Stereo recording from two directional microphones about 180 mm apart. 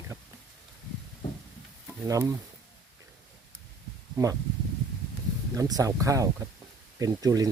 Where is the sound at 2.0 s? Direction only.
15° right (ahead or behind).